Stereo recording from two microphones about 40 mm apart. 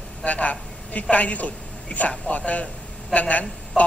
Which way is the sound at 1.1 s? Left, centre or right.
Left.